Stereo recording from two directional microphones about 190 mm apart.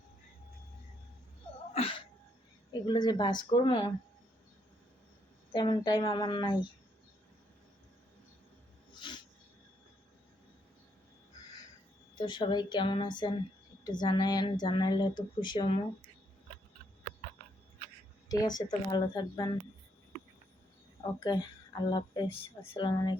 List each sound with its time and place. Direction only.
1.7 s a sound: 30° left (ahead or behind)
2.8 s a woman's voice: 20° left (ahead or behind)
5.5 s a woman's voice: 25° left (ahead or behind)
9.0 s dog: 25° left (ahead or behind)
12.1 s a woman's voice: 25° left (ahead or behind)
18.3 s a woman's voice: 20° left (ahead or behind)
21.2 s a woman's voice: 25° left (ahead or behind)